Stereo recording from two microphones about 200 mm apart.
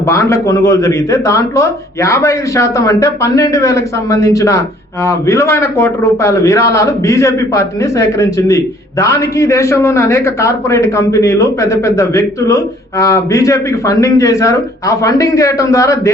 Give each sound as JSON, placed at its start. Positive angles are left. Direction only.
{"t": 0.0, "sound": "a man's voice", "side_deg": 15}